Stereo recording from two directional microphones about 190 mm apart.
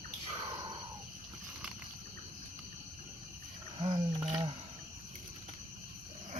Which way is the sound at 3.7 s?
30° right (ahead or behind).